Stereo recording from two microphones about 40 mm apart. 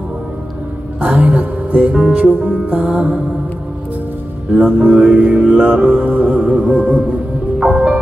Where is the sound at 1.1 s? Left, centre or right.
Right.